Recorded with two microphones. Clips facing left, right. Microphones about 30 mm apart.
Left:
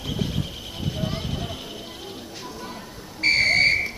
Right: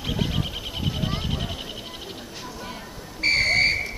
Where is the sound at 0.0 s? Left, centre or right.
Right.